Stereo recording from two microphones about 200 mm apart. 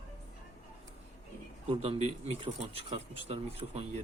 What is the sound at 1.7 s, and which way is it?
Speech, 30° right (ahead or behind).